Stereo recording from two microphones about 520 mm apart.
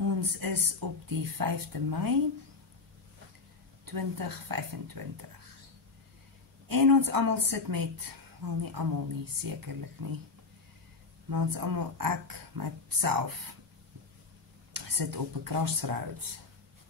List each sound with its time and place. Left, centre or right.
0.0 s speech: right
3.8 s speech: right
6.7 s speech: right
11.2 s speech: right
14.7 s speech: right